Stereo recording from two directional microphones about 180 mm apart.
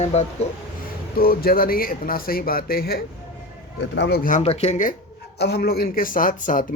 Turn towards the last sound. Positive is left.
turn(degrees=50)  # may be behind; listen again after turning